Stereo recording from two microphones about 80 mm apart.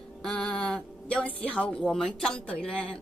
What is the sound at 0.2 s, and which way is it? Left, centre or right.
Speech, centre.